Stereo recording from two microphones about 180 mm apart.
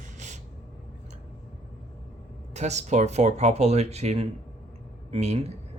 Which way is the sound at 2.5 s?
40° right (ahead or behind).